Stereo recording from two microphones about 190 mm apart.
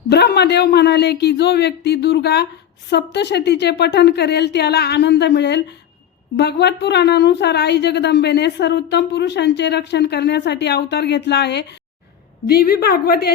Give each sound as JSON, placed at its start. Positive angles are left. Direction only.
{"t": 0.1, "sound": "a woman's voice", "side_deg": 60}